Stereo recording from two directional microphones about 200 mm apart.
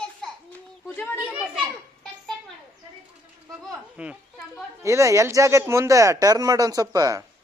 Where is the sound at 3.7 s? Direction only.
Centre (ahead or behind).